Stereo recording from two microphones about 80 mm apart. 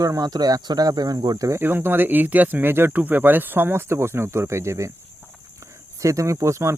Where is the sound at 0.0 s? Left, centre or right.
Right.